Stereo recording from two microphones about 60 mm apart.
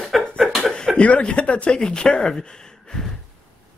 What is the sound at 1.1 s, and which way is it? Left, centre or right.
Speech, centre.